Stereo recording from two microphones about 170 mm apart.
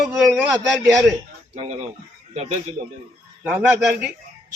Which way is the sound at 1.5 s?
40° right (ahead or behind).